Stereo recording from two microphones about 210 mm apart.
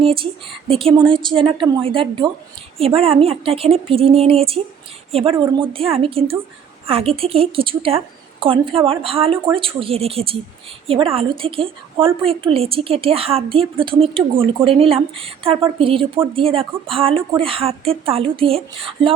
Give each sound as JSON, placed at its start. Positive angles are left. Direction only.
{"t": 0.0, "sound": "a woman's voice", "side_deg": -25}